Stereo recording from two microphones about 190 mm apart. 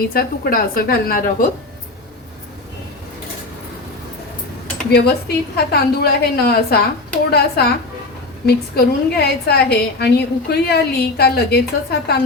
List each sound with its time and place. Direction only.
0.1 s a woman's voice: 50° left (ahead or behind)
4.9 s a woman's voice: 55° left (ahead or behind)